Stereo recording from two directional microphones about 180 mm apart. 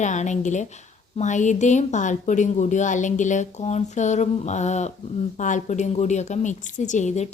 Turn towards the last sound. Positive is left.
turn(degrees=40)  # may be behind; listen again after turning